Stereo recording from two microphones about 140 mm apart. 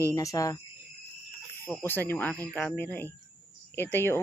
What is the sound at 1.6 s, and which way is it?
Speech, 15° left (ahead or behind).